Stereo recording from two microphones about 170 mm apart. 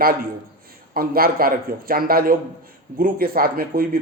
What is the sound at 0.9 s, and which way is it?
Speech, 60° right (ahead or behind).